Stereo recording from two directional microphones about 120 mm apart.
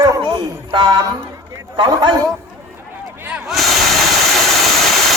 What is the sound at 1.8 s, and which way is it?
Speech, 40° right (ahead or behind).